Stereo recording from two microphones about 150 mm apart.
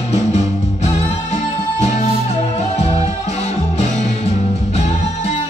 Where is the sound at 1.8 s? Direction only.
45° left (ahead or behind).